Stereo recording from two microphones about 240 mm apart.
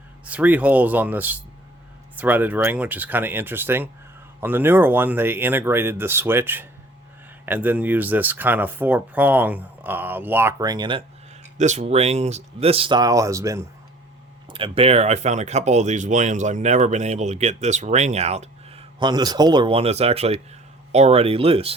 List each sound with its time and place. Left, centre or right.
0.3 s speech: centre
11.5 s speech: right; by 13.7 s centre
14.5 s speech: right